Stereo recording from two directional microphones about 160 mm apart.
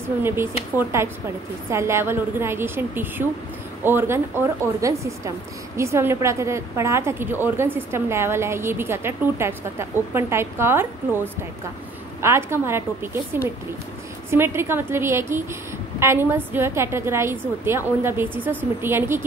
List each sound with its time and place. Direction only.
0.2 s a woman's voice: 15° right (ahead or behind)